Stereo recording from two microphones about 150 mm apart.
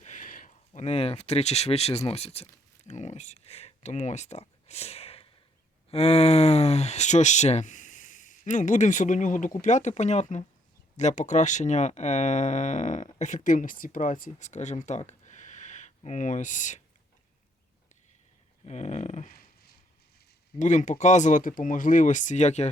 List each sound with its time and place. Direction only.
0.0 s a sound: 60° left (ahead or behind)
0.7 s speech: 45° left (ahead or behind)
18.6 s speech: 50° left (ahead or behind)
20.6 s speech: 55° left (ahead or behind)